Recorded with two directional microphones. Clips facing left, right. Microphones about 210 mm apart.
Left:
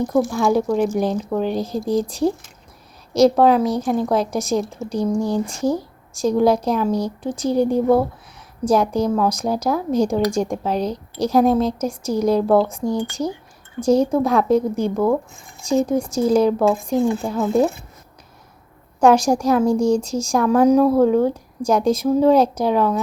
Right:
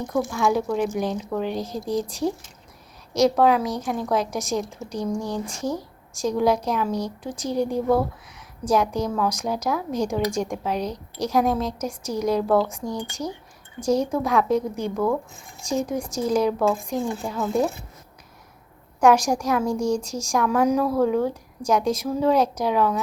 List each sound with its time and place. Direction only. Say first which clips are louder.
0.2 s a woman's voice: left 4 dB; 35° left (ahead or behind)
16.0 s speech: left 7 dB; 5° left (ahead or behind)
16.2 s speech: left 5 dB; 30° left (ahead or behind)
18.9 s a woman's voice: left 4 dB; 30° left (ahead or behind)